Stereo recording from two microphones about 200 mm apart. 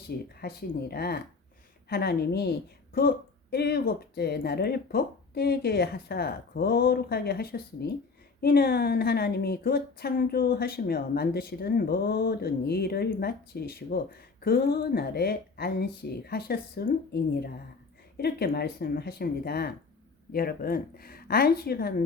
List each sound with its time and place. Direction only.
0.3 s a woman's voice: 50° left (ahead or behind)